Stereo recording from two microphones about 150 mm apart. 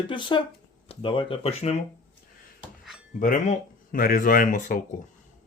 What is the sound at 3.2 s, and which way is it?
Speech, 65° left (ahead or behind).